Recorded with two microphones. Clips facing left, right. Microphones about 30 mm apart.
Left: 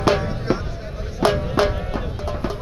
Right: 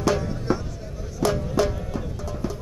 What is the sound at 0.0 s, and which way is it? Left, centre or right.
Music, left.